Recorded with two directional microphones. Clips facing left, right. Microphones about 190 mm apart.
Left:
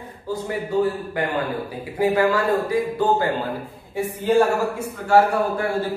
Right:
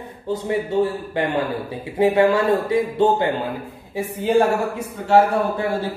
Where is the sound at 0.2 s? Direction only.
25° right (ahead or behind).